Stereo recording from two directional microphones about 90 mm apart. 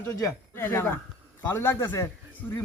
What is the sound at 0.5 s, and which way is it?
A man's voice, 25° left (ahead or behind).